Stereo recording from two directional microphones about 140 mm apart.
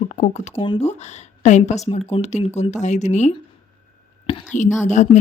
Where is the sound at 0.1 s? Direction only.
55° left (ahead or behind).